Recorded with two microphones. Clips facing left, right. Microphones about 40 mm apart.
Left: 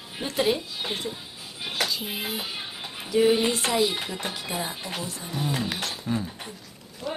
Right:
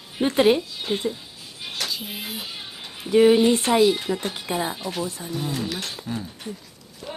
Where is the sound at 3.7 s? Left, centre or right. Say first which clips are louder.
Right 6 dB; right.